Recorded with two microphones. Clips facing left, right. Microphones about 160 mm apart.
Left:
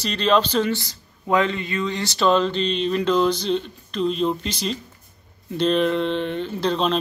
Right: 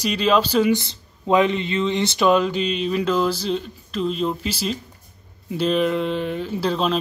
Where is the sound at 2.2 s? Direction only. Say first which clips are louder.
Even; 10° right (ahead or behind).